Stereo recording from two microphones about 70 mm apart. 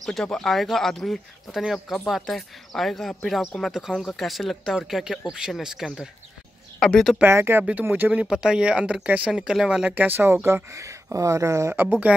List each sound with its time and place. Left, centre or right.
0.0 s speech: centre
3.7 s speech: centre
7.2 s speech: right
7.9 s speech: right
8.3 s speech: centre
9.3 s speech: centre; by 11.7 s right
12.1 s speech: centre